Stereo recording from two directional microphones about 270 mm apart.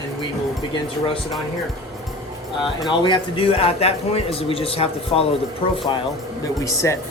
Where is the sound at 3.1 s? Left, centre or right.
Centre.